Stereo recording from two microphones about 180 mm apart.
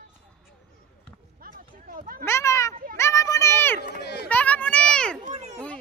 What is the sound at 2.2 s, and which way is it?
Speech, 15° left (ahead or behind).